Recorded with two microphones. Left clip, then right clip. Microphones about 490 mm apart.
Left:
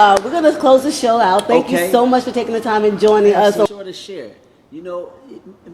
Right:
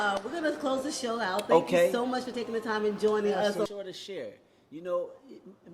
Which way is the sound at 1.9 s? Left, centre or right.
Left.